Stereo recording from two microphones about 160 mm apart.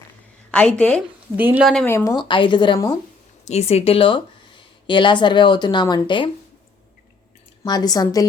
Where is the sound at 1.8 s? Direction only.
20° left (ahead or behind).